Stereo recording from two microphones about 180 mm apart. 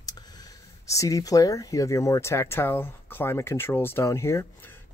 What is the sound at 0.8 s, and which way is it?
Speech, 15° left (ahead or behind).